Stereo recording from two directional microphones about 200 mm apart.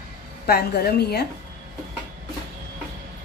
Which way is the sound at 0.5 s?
50° left (ahead or behind).